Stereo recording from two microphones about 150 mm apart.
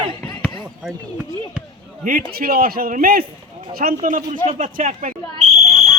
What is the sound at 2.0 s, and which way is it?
A man's voice, 75° right (ahead or behind).